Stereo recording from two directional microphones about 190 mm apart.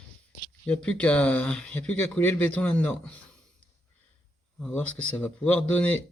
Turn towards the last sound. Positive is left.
turn(degrees=10)  # may be behind; listen again after turning